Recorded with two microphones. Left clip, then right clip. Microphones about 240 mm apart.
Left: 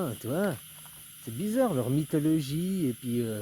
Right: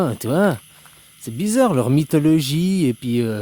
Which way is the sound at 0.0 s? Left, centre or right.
Right.